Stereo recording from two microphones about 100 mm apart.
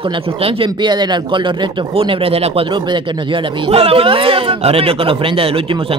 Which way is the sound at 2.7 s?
55° right (ahead or behind).